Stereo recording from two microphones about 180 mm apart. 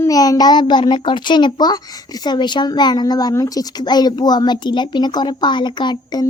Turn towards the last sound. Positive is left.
turn(degrees=25)  # may be behind; listen again after turning